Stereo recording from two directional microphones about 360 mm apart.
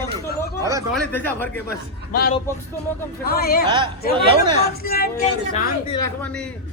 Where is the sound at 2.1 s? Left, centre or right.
Left.